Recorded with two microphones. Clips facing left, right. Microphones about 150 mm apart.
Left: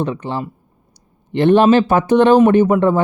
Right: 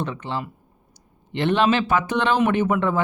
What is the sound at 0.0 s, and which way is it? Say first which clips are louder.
Speech: left 6 dB; 40° left (ahead or behind).